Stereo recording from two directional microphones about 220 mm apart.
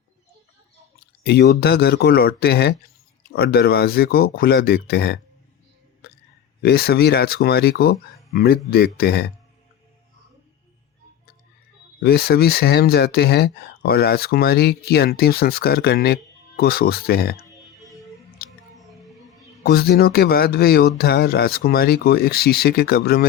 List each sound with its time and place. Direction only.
1.2 s speech: 45° left (ahead or behind)
6.0 s a sound: 45° left (ahead or behind)
6.6 s speech: 45° left (ahead or behind)
11.9 s speech: 45° left (ahead or behind)
18.4 s music: 45° left (ahead or behind)
19.6 s speech: 45° left (ahead or behind)